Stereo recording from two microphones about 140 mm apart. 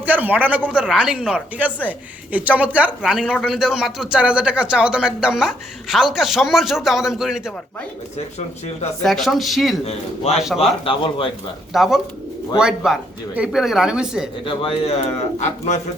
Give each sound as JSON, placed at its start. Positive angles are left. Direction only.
{"t": 0.0, "sound": "speech", "side_deg": -15}
{"t": 9.0, "sound": "speech", "side_deg": 0}
{"t": 11.7, "sound": "speech", "side_deg": 0}
{"t": 14.4, "sound": "speech", "side_deg": 40}
{"t": 15.4, "sound": "speech", "side_deg": 55}